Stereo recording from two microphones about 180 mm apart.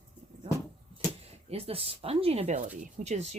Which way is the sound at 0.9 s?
35° right (ahead or behind).